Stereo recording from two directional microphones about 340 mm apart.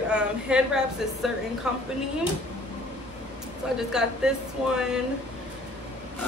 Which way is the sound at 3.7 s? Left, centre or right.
Centre.